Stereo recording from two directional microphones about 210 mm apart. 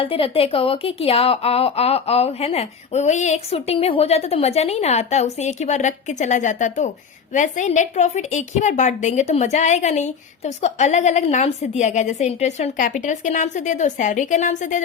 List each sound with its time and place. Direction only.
0.0 s a woman's voice: 25° left (ahead or behind)